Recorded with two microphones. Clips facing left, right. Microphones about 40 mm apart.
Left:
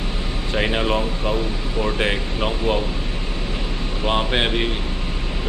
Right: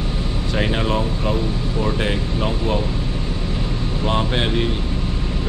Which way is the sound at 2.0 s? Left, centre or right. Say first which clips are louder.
Even; left.